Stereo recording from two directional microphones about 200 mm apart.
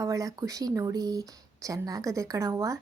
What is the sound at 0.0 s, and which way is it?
A woman's voice, 15° right (ahead or behind).